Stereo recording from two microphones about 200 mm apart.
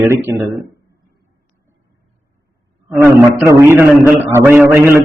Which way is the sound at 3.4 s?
15° right (ahead or behind).